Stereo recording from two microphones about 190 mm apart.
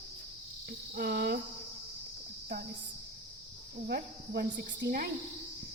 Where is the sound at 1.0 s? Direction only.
55° right (ahead or behind).